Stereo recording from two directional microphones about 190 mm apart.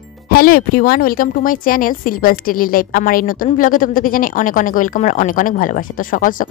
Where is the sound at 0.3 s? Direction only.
50° left (ahead or behind).